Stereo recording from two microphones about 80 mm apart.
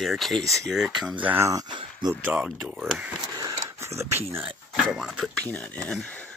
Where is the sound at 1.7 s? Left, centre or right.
Right.